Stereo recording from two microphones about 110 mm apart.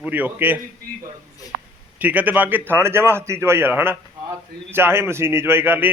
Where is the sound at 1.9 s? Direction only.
15° right (ahead or behind).